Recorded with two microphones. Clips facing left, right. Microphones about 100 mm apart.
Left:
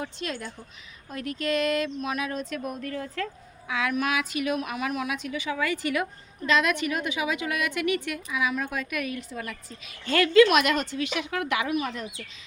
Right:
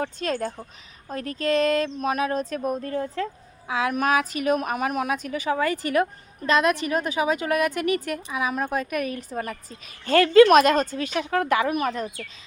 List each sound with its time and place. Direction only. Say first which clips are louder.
0.0 s a woman's voice: right 7 dB; 40° right (ahead or behind)